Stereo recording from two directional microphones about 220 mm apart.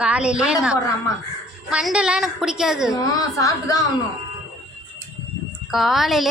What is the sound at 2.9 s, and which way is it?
Speech, 15° left (ahead or behind).